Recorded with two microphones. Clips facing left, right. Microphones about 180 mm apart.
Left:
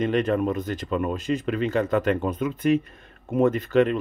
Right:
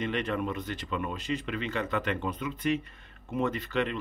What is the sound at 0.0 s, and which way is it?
Speech, 45° left (ahead or behind).